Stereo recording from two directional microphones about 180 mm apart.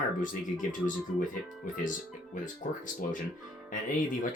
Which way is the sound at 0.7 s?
45° left (ahead or behind).